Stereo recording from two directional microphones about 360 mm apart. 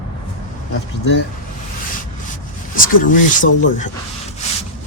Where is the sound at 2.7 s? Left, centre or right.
Left.